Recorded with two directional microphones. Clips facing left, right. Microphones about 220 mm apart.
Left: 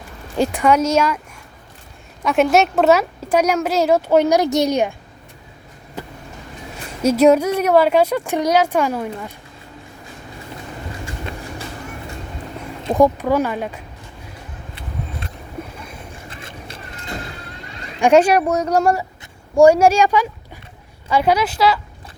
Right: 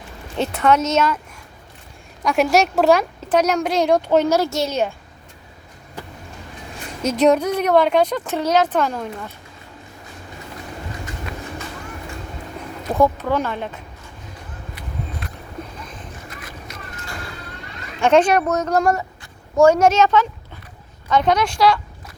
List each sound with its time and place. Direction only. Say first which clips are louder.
0.3 s a woman's voice: left 2 dB; 10° left (ahead or behind)
2.2 s a woman's voice: left 2 dB; centre (ahead or behind)
7.0 s a woman's voice: left 3 dB; 10° left (ahead or behind)
13.0 s a woman's voice: left 3 dB; 10° left (ahead or behind)
16.3 s a sound: left 1 dB; 30° left (ahead or behind)
18.0 s a woman's voice: left 2 dB; 10° left (ahead or behind)
19.2 s a sound: left 3 dB; 15° left (ahead or behind)
21.1 s a woman's voice: left 1 dB; 10° left (ahead or behind)